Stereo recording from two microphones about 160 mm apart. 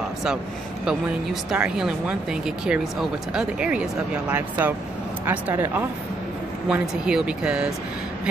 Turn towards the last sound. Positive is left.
turn(degrees=-5)  # may be behind; listen again after turning